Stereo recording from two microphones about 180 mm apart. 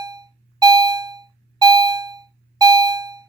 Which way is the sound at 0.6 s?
20° right (ahead or behind).